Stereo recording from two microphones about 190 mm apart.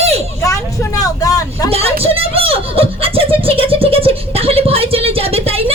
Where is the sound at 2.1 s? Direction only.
30° right (ahead or behind).